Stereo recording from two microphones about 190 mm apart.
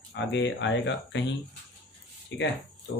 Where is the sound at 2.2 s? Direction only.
70° left (ahead or behind).